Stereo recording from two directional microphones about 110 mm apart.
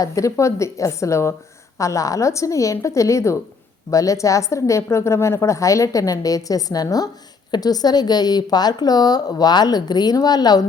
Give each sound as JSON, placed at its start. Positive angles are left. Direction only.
{"t": 0.0, "sound": "a woman's voice", "side_deg": 30}